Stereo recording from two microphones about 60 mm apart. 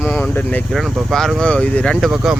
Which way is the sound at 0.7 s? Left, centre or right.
Centre.